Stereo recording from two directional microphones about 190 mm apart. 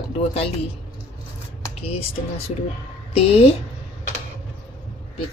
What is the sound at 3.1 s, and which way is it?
Speech, 30° left (ahead or behind).